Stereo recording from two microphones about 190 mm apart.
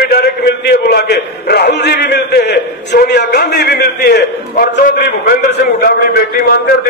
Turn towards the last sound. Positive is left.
turn(degrees=55)  # may be behind; listen again after turning